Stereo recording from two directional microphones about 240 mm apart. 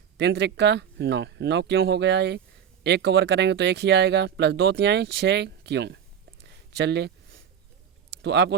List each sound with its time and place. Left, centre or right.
0.2 s speech: right
6.7 s a sound: right
8.2 s speech: right